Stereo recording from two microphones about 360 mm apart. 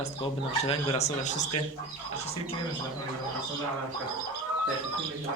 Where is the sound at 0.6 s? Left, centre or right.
Centre.